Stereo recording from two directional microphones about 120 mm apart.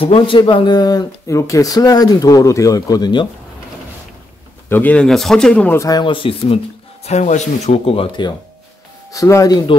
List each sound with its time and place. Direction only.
0.0 s speech: 55° left (ahead or behind)
0.4 s speech: 40° left (ahead or behind)
4.6 s speech: 15° left (ahead or behind)
5.8 s speech: 30° left (ahead or behind)
6.0 s speech: 45° left (ahead or behind)
7.1 s speech: 75° left (ahead or behind); by 8.3 s 50° left (ahead or behind)
9.1 s speech: 25° left (ahead or behind)